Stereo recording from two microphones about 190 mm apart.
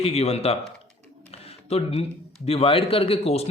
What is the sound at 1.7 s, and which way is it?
Speech, 35° left (ahead or behind).